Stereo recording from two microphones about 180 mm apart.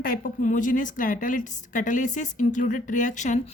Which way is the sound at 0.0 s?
50° left (ahead or behind).